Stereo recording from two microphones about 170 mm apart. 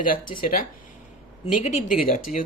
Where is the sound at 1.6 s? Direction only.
40° left (ahead or behind).